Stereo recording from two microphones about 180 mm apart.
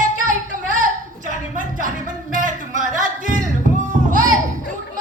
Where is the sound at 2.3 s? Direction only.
45° right (ahead or behind).